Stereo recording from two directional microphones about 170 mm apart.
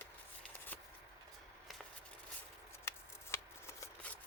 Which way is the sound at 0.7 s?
10° left (ahead or behind).